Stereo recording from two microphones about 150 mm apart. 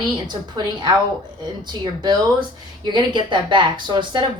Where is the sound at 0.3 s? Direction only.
30° right (ahead or behind).